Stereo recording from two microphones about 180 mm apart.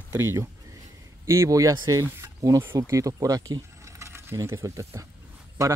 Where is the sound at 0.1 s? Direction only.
15° right (ahead or behind).